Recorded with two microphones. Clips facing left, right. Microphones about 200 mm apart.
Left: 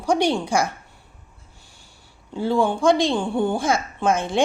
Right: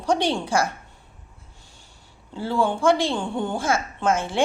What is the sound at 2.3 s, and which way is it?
A woman's voice, 15° left (ahead or behind).